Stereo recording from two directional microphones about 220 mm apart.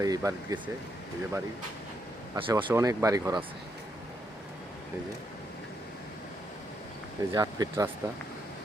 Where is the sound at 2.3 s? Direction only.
15° right (ahead or behind).